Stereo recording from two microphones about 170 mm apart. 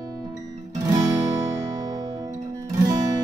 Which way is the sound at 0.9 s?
20° right (ahead or behind).